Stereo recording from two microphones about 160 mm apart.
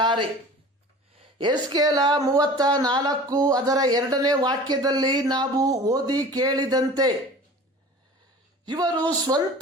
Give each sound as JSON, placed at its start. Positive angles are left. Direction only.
{"t": 0.0, "sound": "a sound", "side_deg": -30}
{"t": 1.4, "sound": "speech", "side_deg": -25}
{"t": 8.6, "sound": "speech", "side_deg": -25}